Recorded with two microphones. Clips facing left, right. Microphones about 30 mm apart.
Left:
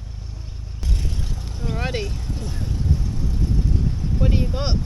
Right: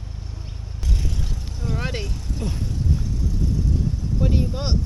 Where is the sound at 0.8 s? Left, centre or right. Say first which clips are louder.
Even; centre.